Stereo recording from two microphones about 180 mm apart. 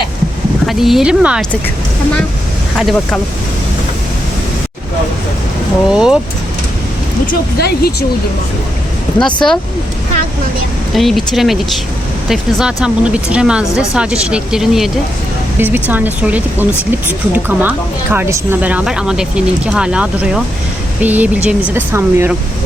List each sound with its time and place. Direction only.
0.7 s speech: centre (ahead or behind)
2.7 s speech: centre (ahead or behind)
5.9 s speech: 5° right (ahead or behind)
7.6 s speech: 60° left (ahead or behind)
9.4 s speech: centre (ahead or behind)
10.9 s speech: centre (ahead or behind)